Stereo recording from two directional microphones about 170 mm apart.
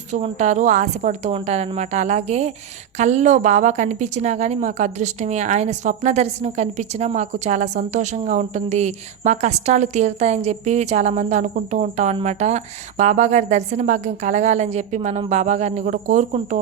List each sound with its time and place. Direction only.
0.1 s a woman's voice: 40° right (ahead or behind)